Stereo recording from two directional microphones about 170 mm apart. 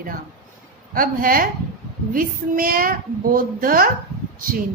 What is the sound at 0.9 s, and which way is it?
A child's voice, 55° right (ahead or behind).